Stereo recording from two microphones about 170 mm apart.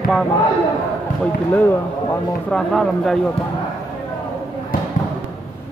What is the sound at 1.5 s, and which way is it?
Speech, 10° left (ahead or behind).